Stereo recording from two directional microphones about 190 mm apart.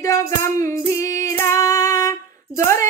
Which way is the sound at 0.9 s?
15° left (ahead or behind).